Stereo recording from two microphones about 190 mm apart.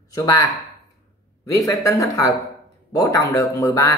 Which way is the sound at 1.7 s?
15° left (ahead or behind).